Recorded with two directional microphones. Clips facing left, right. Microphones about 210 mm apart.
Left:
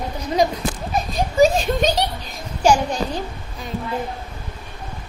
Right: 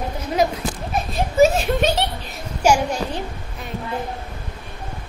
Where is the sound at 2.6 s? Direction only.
10° right (ahead or behind).